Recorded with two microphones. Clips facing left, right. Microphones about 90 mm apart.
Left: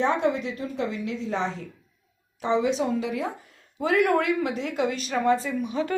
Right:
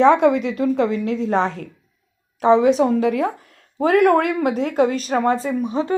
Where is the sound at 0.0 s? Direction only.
80° right.